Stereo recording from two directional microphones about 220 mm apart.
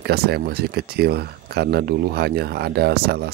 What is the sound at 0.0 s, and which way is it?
Speech, 45° right (ahead or behind).